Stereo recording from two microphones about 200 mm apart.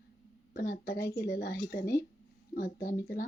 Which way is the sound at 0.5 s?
50° left (ahead or behind).